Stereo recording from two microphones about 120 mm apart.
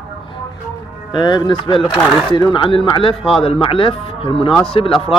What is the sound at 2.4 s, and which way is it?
Speech, 40° left (ahead or behind).